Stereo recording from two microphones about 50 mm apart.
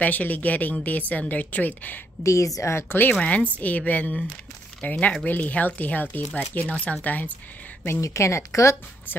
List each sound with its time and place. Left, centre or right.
0.0 s a woman's voice: left
2.2 s speech: left
2.9 s a woman's voice: left
3.2 s a woman's voice: left
8.0 s speech: left